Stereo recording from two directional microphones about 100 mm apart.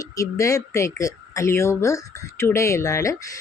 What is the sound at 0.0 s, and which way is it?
Speech, 30° left (ahead or behind).